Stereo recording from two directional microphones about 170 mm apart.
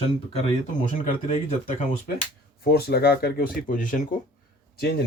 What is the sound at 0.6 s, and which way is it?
Speech, 45° left (ahead or behind).